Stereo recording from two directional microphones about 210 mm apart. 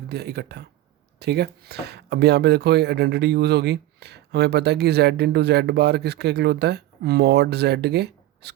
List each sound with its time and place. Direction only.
0.1 s speech: 50° right (ahead or behind)